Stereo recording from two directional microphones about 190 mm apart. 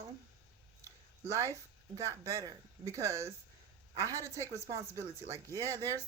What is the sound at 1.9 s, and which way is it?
Speech, 15° right (ahead or behind).